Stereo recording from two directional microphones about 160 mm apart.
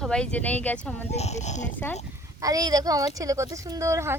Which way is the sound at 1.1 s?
45° left (ahead or behind).